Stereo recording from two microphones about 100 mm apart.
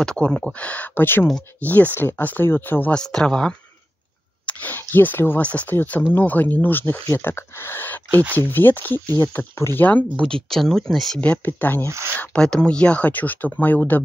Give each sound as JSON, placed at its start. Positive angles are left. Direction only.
{"t": 0.0, "sound": "speech", "side_deg": 10}
{"t": 3.0, "sound": "speech", "side_deg": 5}
{"t": 10.2, "sound": "speech", "side_deg": 5}
{"t": 11.1, "sound": "speech", "side_deg": 15}